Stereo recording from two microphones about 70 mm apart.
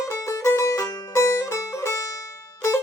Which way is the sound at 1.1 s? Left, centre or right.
Left.